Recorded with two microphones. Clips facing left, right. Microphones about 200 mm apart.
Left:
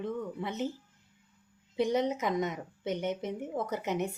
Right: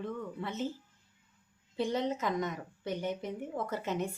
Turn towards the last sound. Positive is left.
turn(degrees=20)  # may be behind; listen again after turning